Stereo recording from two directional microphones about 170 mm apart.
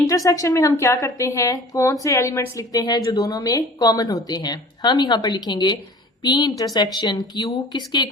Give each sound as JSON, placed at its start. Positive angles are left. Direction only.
{"t": 0.1, "sound": "a woman's voice", "side_deg": 20}